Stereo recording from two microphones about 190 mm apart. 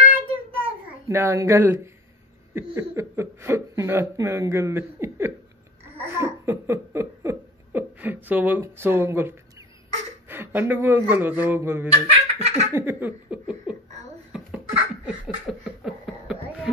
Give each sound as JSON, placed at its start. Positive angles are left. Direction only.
{"t": 1.0, "sound": "speech", "side_deg": -15}
{"t": 6.0, "sound": "laughter", "side_deg": -15}
{"t": 10.2, "sound": "speech", "side_deg": -10}
{"t": 12.1, "sound": "laughter", "side_deg": -35}
{"t": 12.7, "sound": "speech", "side_deg": -10}
{"t": 14.3, "sound": "a sound", "side_deg": -5}